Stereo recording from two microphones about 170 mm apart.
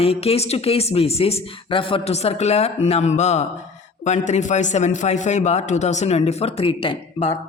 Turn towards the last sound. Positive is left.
turn(degrees=35)  # may be behind; listen again after turning